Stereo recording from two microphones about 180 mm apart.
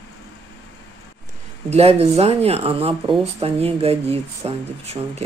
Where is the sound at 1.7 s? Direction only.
35° right (ahead or behind).